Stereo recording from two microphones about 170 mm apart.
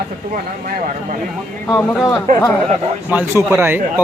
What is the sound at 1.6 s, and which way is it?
Speech, 15° left (ahead or behind).